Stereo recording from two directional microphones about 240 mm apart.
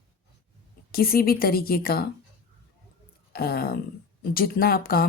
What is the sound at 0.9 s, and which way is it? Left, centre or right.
Speech, left.